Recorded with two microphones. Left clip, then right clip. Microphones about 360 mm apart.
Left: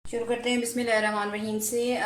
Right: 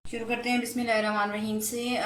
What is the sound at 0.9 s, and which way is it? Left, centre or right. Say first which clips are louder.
Speech: left 1 dB; centre.